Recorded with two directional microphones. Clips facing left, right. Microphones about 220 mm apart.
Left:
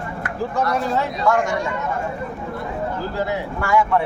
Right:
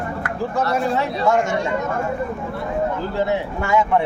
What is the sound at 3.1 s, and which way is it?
Speech, 20° right (ahead or behind).